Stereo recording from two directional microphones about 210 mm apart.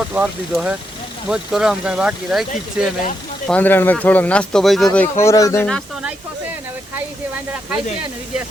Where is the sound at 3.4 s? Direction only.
5° left (ahead or behind).